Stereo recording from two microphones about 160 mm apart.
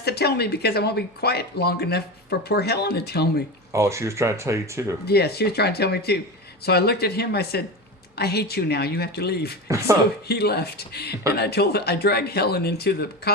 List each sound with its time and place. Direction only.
0.0 s speech: 90° left
3.7 s speech: 20° right (ahead or behind)
5.0 s speech: 85° left
9.6 s speech: 20° right (ahead or behind)
10.2 s speech: 85° left